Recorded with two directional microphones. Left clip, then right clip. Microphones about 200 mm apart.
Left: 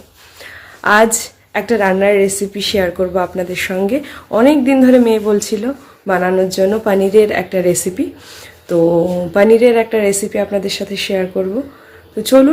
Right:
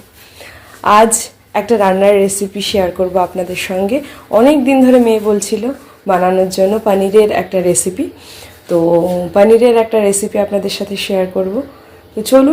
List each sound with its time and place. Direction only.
0.8 s a woman's voice: 10° left (ahead or behind)